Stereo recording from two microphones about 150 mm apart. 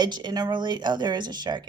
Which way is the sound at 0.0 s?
30° right (ahead or behind).